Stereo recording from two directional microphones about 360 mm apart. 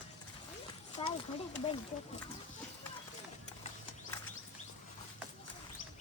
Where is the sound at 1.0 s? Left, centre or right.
Centre.